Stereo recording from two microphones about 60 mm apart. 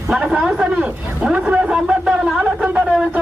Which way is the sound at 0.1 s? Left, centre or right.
Centre.